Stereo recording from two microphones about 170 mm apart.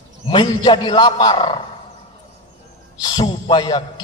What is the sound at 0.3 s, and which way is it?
A man's voice, 30° left (ahead or behind).